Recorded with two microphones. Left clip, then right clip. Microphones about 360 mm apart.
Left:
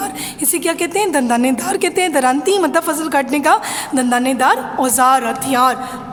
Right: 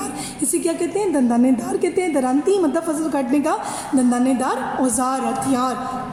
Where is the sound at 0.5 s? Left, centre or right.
Left.